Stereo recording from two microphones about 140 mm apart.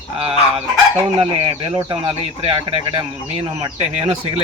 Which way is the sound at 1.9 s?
35° right (ahead or behind).